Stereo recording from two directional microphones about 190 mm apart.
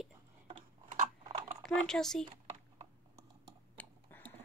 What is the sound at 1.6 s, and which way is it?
Speech, centre (ahead or behind).